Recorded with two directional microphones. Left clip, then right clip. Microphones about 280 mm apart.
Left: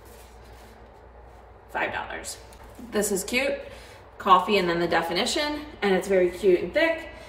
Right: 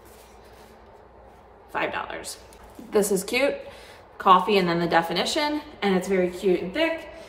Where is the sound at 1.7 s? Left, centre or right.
Centre.